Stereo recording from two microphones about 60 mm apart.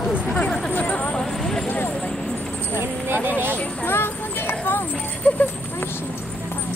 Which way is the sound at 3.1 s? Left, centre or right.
Right.